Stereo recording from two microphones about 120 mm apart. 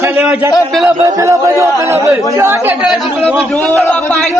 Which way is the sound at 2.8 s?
5° right (ahead or behind).